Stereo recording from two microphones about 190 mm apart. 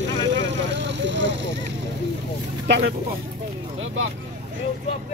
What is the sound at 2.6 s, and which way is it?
Vehicle, 60° right (ahead or behind).